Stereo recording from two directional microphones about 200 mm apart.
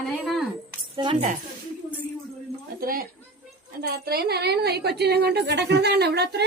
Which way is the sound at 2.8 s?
45° right (ahead or behind).